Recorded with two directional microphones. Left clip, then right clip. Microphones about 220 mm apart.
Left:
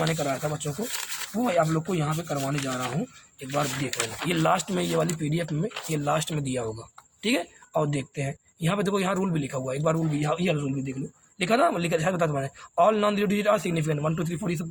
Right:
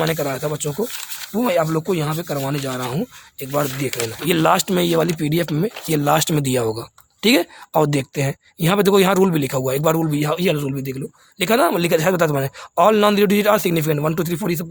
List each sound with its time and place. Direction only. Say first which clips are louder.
0.1 s speech: right 6 dB; 50° right (ahead or behind)